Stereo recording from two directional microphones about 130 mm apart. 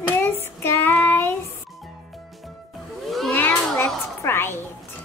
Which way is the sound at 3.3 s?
15° left (ahead or behind).